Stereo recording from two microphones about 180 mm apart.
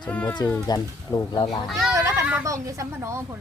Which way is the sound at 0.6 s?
20° left (ahead or behind).